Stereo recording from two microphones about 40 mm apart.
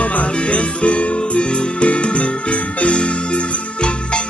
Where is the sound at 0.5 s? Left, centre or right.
Left.